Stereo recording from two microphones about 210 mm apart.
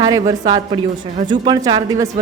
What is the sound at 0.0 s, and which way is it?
A woman's voice, 20° right (ahead or behind).